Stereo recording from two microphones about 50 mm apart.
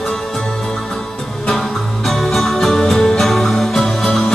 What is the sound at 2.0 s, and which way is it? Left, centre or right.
Music, centre.